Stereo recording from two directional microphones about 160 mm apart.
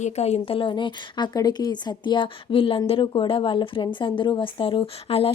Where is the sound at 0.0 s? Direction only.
40° left (ahead or behind).